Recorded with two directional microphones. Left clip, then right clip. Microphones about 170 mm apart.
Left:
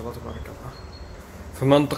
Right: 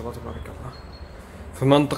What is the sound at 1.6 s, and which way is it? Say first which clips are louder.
Speech: even; 10° right (ahead or behind).